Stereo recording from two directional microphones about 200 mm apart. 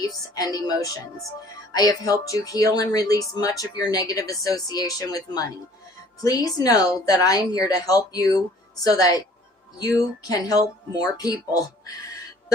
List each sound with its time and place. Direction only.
0.0 s speech: 20° left (ahead or behind)
10.2 s speech: 20° left (ahead or behind)